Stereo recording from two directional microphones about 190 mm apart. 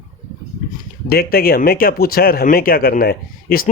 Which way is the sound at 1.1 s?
50° left (ahead or behind).